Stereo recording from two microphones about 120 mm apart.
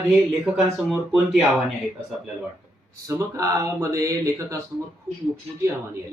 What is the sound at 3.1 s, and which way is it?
Speech, 25° right (ahead or behind).